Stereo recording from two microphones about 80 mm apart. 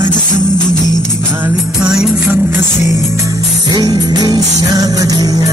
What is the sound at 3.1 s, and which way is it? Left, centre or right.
Music, right.